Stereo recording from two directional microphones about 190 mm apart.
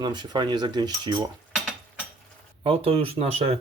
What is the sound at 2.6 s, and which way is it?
Speech, 30° right (ahead or behind).